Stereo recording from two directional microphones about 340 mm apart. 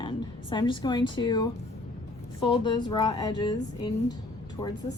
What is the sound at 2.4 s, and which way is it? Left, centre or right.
Speech, centre.